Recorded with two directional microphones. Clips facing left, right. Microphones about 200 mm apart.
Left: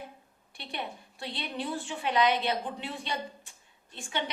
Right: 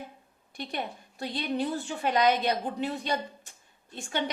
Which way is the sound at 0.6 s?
45° right (ahead or behind).